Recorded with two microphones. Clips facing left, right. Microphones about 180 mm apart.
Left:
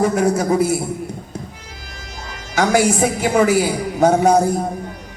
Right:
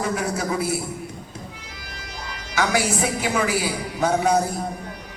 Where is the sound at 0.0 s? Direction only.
45° left (ahead or behind).